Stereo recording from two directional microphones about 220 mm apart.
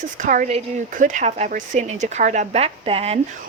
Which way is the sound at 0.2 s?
35° right (ahead or behind).